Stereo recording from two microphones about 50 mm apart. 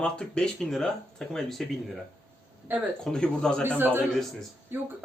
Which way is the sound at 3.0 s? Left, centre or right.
Centre.